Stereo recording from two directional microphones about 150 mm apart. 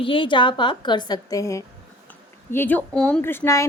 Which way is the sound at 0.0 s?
35° left (ahead or behind).